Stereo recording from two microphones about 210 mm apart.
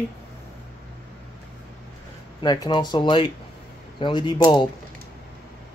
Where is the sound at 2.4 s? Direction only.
20° left (ahead or behind).